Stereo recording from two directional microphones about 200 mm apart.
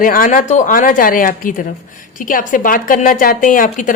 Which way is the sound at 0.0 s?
45° left (ahead or behind).